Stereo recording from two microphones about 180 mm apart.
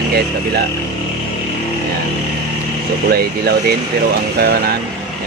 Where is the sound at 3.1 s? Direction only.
60° right (ahead or behind).